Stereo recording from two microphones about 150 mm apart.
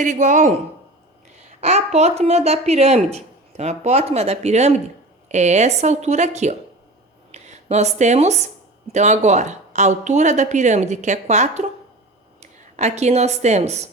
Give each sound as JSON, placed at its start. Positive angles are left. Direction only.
{"t": 0.0, "sound": "speech", "side_deg": -55}